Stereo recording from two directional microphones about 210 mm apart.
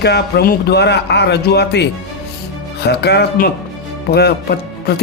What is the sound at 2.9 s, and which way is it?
A man's voice, 50° left (ahead or behind).